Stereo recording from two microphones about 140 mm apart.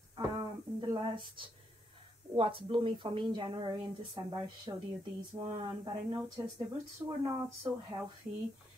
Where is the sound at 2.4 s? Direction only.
40° right (ahead or behind).